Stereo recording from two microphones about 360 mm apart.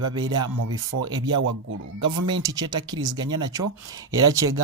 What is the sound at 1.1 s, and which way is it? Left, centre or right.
Speech, centre.